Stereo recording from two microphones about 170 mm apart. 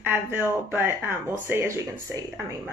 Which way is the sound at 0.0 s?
10° right (ahead or behind).